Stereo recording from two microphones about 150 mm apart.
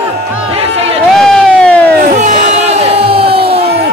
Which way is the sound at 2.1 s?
50° right (ahead or behind).